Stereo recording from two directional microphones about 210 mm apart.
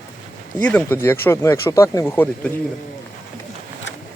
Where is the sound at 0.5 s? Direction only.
10° left (ahead or behind).